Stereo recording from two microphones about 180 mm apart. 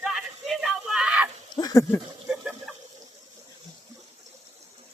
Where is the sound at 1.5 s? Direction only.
20° left (ahead or behind).